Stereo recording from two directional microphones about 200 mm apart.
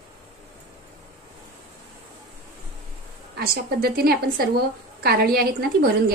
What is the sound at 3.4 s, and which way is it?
A woman's voice, 50° right (ahead or behind).